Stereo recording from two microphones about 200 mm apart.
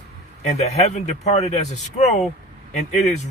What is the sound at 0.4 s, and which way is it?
Speech, 35° left (ahead or behind).